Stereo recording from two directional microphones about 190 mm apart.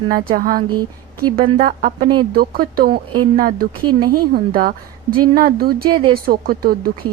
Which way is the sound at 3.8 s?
25° right (ahead or behind).